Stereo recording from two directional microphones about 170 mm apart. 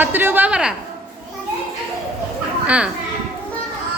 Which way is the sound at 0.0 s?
10° right (ahead or behind).